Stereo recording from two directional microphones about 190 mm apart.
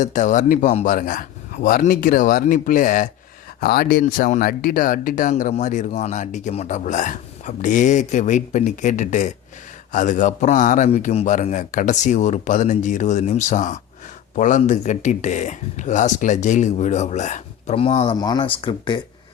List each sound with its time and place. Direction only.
0.0 s speech: 40° left (ahead or behind)